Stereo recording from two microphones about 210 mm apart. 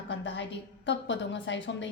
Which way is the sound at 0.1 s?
55° left (ahead or behind).